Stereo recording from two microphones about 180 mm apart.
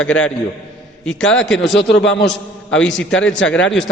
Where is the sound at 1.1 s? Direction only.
90° left.